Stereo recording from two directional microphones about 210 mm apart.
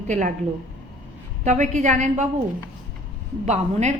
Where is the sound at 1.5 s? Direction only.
35° right (ahead or behind).